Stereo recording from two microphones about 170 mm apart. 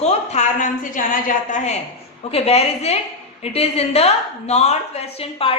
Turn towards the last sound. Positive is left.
turn(degrees=35)  # may be behind; listen again after turning